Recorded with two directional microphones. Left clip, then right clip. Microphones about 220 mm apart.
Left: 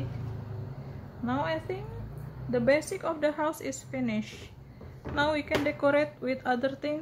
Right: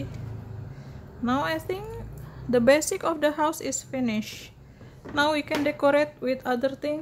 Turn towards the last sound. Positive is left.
turn(degrees=-20)  # may be behind; listen again after turning